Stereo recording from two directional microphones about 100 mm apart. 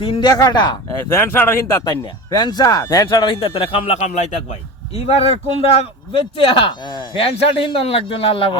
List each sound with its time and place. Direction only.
0.0 s a man's voice: 60° left (ahead or behind)
0.3 s speech: 45° left (ahead or behind)
1.1 s speech: 25° left (ahead or behind)
1.8 s speech: 45° left (ahead or behind)
3.4 s speech: 70° left (ahead or behind)
5.0 s speech: 90° left; by 8.5 s 60° left (ahead or behind)